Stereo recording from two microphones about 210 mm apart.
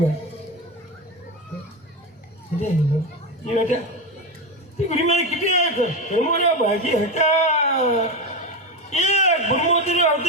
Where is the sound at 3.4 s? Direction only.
35° left (ahead or behind).